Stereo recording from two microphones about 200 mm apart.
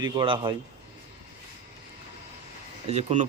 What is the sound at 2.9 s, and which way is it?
Speech, 35° right (ahead or behind).